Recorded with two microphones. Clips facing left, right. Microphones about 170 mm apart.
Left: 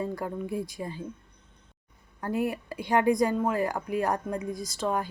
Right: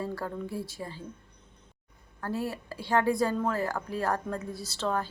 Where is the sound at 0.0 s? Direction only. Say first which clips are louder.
Left 2 dB; 20° left (ahead or behind).